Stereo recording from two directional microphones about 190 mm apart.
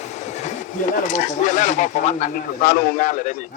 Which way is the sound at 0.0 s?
40° left (ahead or behind).